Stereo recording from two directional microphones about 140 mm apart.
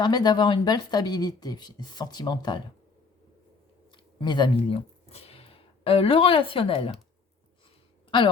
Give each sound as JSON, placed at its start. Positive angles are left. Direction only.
{"t": 0.0, "sound": "speech", "side_deg": 30}
{"t": 3.9, "sound": "speech", "side_deg": 35}
{"t": 5.0, "sound": "a woman's voice", "side_deg": 45}